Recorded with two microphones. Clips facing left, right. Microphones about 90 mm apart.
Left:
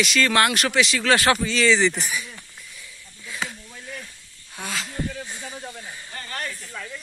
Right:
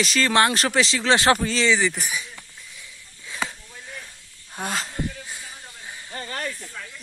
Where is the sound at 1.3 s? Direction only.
40° right (ahead or behind).